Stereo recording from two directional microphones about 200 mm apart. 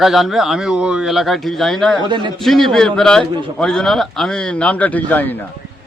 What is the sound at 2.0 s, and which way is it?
Speech, 25° right (ahead or behind).